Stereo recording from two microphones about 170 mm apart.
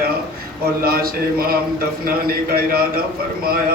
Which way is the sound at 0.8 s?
60° right (ahead or behind).